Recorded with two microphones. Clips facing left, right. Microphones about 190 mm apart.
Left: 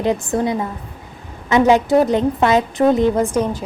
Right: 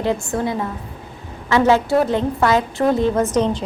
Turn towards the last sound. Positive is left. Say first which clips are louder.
# left 1 dB
turn(degrees=10)  # may be behind; listen again after turning